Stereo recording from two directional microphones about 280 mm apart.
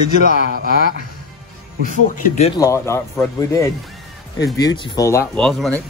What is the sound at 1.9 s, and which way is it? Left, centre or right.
Speech, left.